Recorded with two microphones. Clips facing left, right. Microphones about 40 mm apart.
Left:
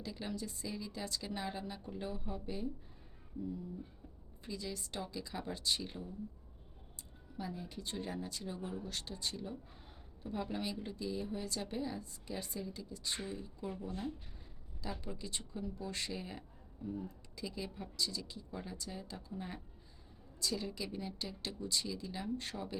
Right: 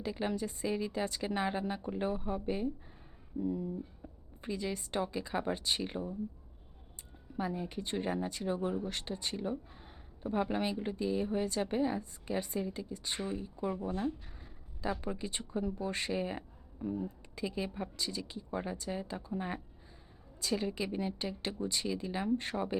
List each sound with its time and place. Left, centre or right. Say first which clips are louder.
0.0 s a woman's voice: right 7 dB; right
4.4 s a woman's voice: right 7 dB; right
7.3 s a woman's voice: right 7 dB; right